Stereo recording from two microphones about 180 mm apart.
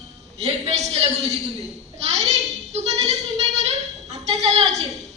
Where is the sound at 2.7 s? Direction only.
40° right (ahead or behind).